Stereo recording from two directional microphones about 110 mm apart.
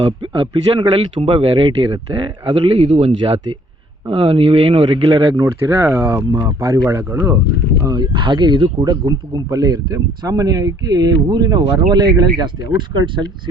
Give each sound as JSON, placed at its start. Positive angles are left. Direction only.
{"t": 0.0, "sound": "speech", "side_deg": -50}
{"t": 1.3, "sound": "a man's voice", "side_deg": -55}
{"t": 5.3, "sound": "speech", "side_deg": -25}
{"t": 7.9, "sound": "speech", "side_deg": -45}